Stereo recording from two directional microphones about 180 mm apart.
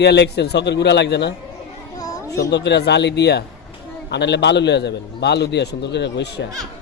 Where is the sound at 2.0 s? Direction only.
20° left (ahead or behind).